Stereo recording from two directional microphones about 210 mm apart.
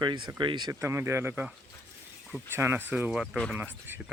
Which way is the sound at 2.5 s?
10° right (ahead or behind).